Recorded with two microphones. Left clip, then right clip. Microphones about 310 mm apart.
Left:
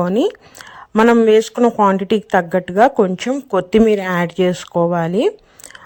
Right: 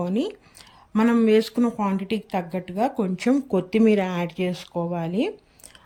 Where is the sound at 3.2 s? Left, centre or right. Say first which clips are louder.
Left 5 dB; centre.